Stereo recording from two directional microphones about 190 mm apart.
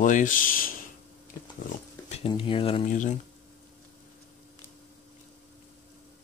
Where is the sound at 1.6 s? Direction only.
35° left (ahead or behind).